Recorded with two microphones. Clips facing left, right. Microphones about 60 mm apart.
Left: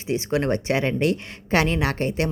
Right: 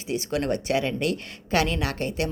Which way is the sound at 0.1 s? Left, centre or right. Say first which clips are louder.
Left 3 dB; left.